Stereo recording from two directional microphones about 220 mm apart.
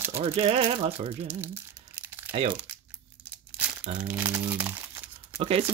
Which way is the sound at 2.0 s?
10° right (ahead or behind).